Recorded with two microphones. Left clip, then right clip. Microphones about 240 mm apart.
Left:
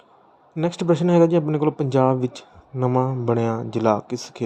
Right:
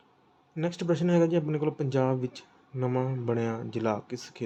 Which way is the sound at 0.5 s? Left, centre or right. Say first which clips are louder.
Left 8 dB; left.